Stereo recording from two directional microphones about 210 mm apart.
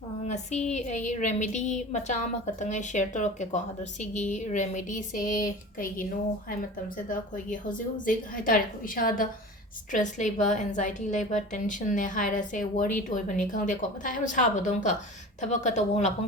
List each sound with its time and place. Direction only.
0.3 s a woman's voice: 35° left (ahead or behind)